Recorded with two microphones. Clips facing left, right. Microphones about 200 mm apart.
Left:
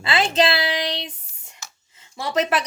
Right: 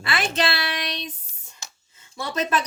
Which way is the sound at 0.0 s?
25° left (ahead or behind).